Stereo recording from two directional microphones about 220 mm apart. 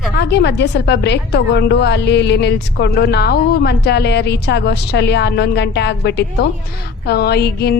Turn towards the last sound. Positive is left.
turn(degrees=45)  # may be behind; listen again after turning